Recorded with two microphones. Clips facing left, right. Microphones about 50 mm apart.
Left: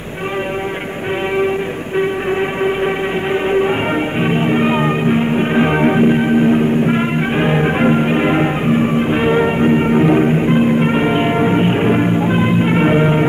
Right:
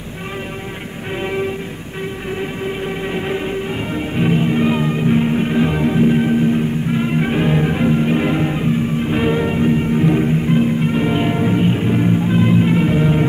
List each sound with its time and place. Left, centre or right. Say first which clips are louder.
3.3 s music: left 7 dB; left
6.0 s music: left 3 dB; left